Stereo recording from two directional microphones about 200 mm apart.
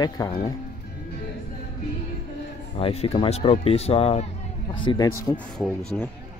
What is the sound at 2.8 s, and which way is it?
Speech, 30° left (ahead or behind).